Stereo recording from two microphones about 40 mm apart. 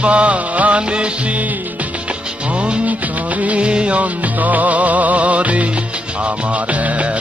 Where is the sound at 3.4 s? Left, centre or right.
Right.